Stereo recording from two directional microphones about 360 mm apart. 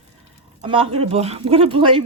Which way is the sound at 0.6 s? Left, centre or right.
Centre.